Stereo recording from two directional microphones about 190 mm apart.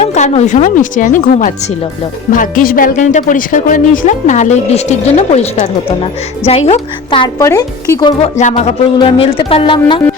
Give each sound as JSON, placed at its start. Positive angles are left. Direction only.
{"t": 0.0, "sound": "a woman's voice", "side_deg": 35}
{"t": 8.4, "sound": "a woman's voice", "side_deg": 35}